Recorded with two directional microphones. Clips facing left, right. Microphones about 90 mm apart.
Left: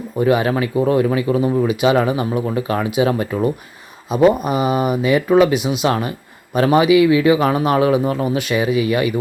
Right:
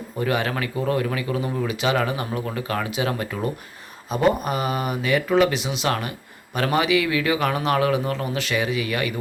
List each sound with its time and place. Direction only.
0.2 s speech: 20° left (ahead or behind)